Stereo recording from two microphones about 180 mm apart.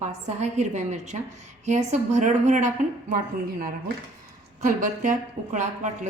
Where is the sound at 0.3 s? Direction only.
40° right (ahead or behind).